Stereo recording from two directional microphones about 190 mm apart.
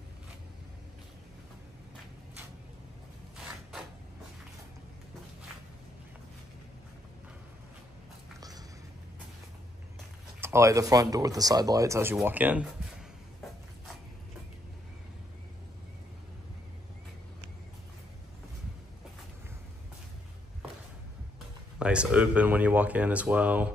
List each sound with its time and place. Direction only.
8.4 s a sound: 20° right (ahead or behind)
10.4 s speech: 15° right (ahead or behind)
21.7 s speech: 5° right (ahead or behind)